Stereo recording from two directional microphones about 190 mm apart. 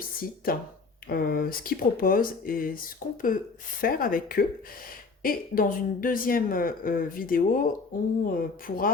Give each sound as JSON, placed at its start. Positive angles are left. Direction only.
{"t": 0.0, "sound": "a woman's voice", "side_deg": 50}